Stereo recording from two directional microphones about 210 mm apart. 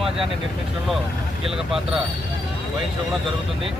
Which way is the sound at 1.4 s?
Centre (ahead or behind).